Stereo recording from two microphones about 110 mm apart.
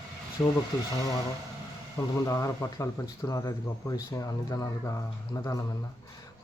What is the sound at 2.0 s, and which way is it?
A man's voice, 35° left (ahead or behind).